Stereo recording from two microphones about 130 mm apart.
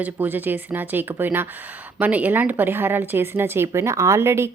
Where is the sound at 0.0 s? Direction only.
15° right (ahead or behind).